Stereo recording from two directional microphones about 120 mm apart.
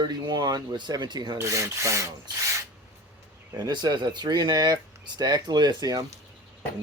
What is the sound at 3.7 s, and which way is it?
Speech, 40° right (ahead or behind).